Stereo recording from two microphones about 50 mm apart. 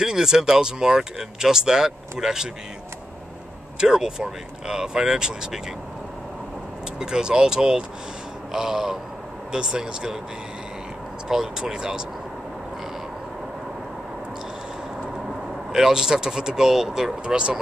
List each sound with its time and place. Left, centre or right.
0.0 s speech: centre
3.8 s speech: centre
7.0 s speech: centre
11.2 s speech: centre
15.7 s speech: centre
17.2 s speech: right